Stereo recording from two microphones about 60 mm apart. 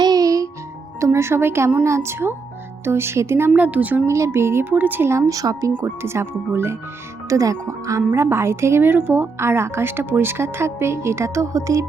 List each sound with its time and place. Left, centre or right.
0.1 s music: right
0.9 s a woman's voice: right
3.5 s speech: right
4.0 s a woman's voice: right
4.7 s speech: right
5.0 s a woman's voice: right
5.8 s a woman's voice: right
7.3 s a woman's voice: right
8.1 s a woman's voice: right